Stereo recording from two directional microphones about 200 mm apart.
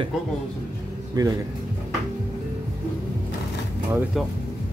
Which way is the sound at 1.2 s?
20° right (ahead or behind).